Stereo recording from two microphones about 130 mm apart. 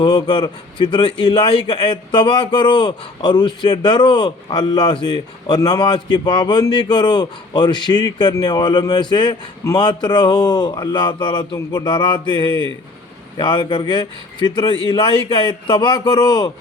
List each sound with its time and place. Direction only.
0.0 s a man's voice: 40° left (ahead or behind)